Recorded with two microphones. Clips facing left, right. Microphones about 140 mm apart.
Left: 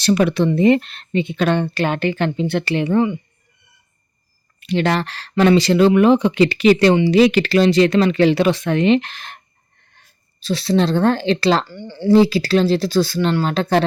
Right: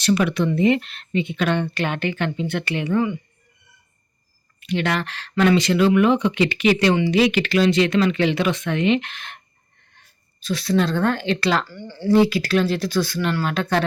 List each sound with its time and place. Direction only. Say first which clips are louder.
0.0 s speech: left 4 dB; 35° left (ahead or behind)
4.6 s speech: left 4 dB; 35° left (ahead or behind)
10.4 s a woman's voice: left 3 dB; 30° left (ahead or behind)